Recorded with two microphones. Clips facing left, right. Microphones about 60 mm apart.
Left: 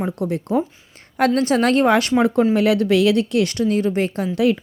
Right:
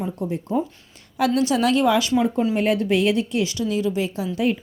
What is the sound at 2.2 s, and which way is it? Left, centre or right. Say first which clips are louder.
Speech: left 4 dB; left.